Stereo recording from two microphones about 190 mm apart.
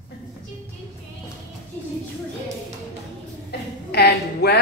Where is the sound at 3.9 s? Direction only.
60° left (ahead or behind).